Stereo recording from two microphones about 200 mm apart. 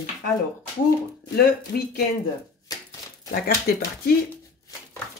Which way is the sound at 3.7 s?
45° left (ahead or behind).